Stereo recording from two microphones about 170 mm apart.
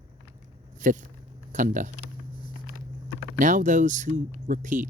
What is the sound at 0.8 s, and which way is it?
Speech, 50° right (ahead or behind).